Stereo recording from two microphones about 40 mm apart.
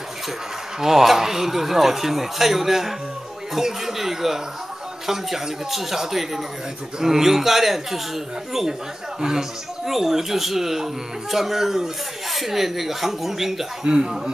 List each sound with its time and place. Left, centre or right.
0.7 s speech: centre
9.2 s speech: centre
13.8 s a man's voice: right